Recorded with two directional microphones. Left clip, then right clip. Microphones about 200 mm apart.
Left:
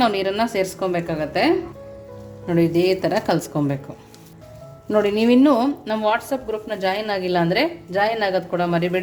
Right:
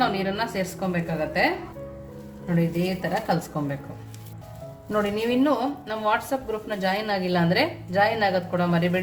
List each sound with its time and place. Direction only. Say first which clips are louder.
0.0 s speech: left 5 dB; 40° left (ahead or behind)
2.6 s a woman's voice: left 9 dB; 45° left (ahead or behind)
4.9 s speech: left 7 dB; 40° left (ahead or behind)